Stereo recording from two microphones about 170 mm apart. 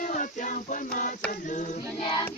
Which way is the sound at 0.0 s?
50° left (ahead or behind).